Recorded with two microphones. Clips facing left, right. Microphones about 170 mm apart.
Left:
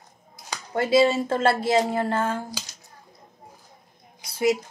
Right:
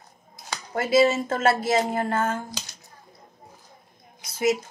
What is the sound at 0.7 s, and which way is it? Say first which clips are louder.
Speech: left 1 dB; 30° left (ahead or behind).